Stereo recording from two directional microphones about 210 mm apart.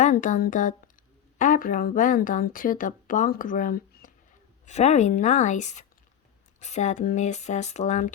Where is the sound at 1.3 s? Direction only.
40° left (ahead or behind).